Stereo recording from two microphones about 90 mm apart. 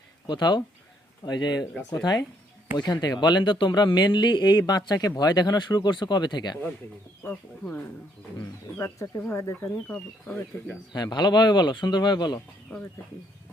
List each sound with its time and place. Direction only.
0.3 s a man's voice: 55° left (ahead or behind)
7.2 s speech: 20° left (ahead or behind)
8.4 s speech: 30° left (ahead or behind)
9.8 s speech: 15° left (ahead or behind)
10.9 s a man's voice: 50° left (ahead or behind)